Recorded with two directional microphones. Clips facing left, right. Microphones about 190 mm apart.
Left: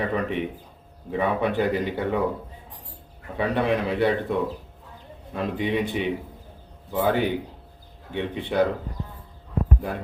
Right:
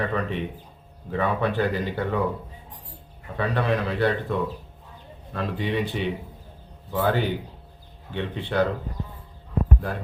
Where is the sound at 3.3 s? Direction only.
20° left (ahead or behind).